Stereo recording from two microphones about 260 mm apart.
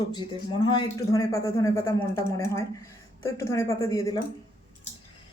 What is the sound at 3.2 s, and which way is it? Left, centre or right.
Speech, centre.